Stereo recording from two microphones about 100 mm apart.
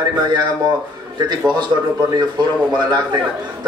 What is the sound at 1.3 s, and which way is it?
Speech, 45° right (ahead or behind).